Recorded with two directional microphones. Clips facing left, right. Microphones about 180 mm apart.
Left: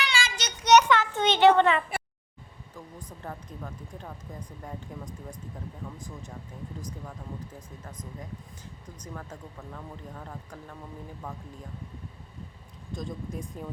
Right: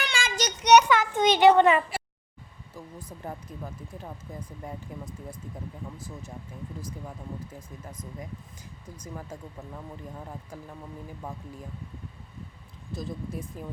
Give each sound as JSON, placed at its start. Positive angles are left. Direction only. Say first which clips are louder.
{"t": 0.0, "sound": "children playing", "louder": "right 2 dB", "side_deg": -50}
{"t": 0.6, "sound": "children playing", "louder": "right 1 dB", "side_deg": -10}
{"t": 2.7, "sound": "speech", "louder": "right 2 dB", "side_deg": -10}
{"t": 9.0, "sound": "speech", "louder": "right 2 dB", "side_deg": -10}
{"t": 12.9, "sound": "speech", "louder": "right 1 dB", "side_deg": -5}